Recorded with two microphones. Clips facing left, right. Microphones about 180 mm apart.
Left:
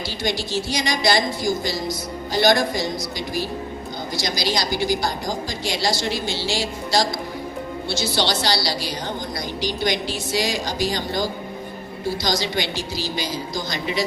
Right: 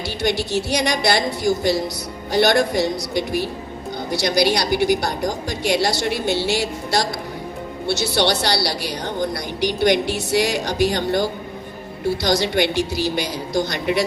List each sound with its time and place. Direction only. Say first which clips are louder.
0.2 s a woman's voice: right 4 dB; 65° right (ahead or behind)
8.0 s a woman's voice: right 3 dB; 60° right (ahead or behind)